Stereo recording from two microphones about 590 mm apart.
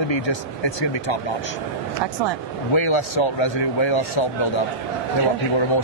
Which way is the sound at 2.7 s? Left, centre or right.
Left.